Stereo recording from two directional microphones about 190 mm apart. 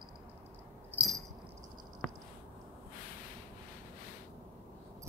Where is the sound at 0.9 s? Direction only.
5° right (ahead or behind).